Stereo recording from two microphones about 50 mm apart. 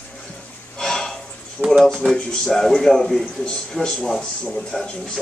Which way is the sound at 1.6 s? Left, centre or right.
Left.